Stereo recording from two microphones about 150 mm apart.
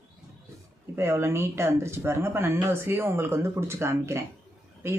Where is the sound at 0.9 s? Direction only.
15° right (ahead or behind).